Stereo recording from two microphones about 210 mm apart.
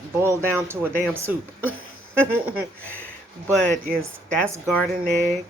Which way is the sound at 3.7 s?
40° right (ahead or behind).